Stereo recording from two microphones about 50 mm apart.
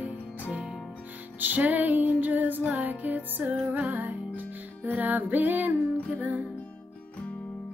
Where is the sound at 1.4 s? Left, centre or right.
Right.